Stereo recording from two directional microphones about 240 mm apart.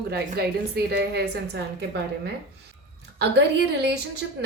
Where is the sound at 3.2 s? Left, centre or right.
Right.